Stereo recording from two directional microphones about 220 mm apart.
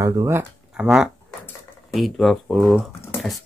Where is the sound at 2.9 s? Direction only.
10° left (ahead or behind).